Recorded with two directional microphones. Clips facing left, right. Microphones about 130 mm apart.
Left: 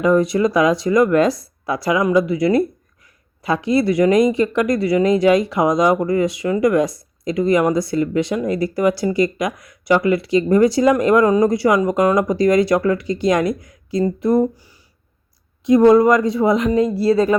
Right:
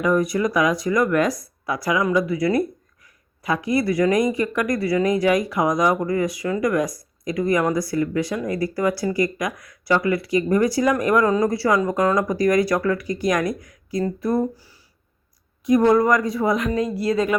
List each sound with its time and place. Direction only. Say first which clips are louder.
0.0 s speech: left 4 dB; 25° left (ahead or behind)